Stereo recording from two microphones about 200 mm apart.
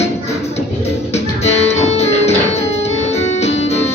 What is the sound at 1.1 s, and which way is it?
Music, 35° left (ahead or behind).